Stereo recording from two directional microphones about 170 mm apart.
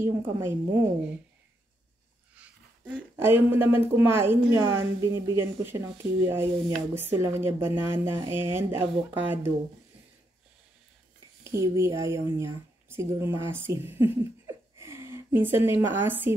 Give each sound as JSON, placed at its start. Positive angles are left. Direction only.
{"t": 0.0, "sound": "speech", "side_deg": -15}
{"t": 2.3, "sound": "a sound", "side_deg": -10}
{"t": 3.2, "sound": "speech", "side_deg": -15}
{"t": 11.4, "sound": "speech", "side_deg": -15}